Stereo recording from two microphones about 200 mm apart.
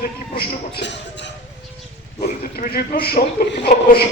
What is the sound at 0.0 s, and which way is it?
Speech, 55° left (ahead or behind).